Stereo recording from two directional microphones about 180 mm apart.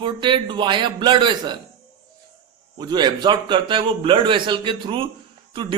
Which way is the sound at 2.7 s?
25° right (ahead or behind).